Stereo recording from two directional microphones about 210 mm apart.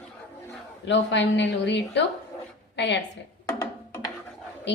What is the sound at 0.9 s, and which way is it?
A woman's voice, 55° left (ahead or behind).